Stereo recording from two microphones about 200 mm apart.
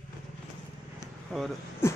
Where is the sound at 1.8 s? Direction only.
15° left (ahead or behind).